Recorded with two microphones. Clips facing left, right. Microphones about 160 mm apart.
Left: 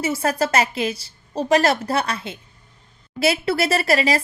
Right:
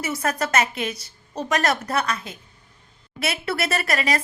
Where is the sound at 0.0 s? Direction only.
30° left (ahead or behind).